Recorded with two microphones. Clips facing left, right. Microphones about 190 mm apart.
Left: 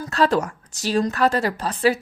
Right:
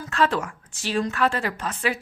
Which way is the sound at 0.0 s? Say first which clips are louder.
Left 4 dB; 40° left (ahead or behind).